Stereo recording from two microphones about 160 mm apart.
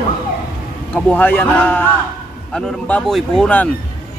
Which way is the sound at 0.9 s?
10° left (ahead or behind).